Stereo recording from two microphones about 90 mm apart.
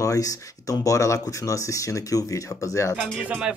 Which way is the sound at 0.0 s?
40° left (ahead or behind).